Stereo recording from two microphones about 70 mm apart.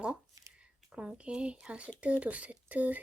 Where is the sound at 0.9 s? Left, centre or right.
Centre.